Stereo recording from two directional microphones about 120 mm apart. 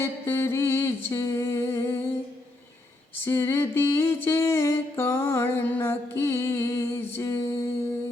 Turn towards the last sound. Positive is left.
turn(degrees=20)  # may be behind; listen again after turning